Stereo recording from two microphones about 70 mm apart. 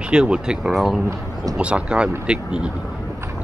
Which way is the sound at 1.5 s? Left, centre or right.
Centre.